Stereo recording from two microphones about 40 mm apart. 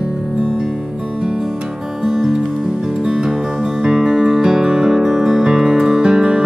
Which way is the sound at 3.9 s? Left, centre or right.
Centre.